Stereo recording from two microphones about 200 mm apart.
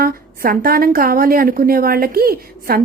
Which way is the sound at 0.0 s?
45° right (ahead or behind).